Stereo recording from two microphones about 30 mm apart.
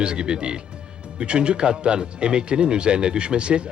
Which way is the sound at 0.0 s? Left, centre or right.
Right.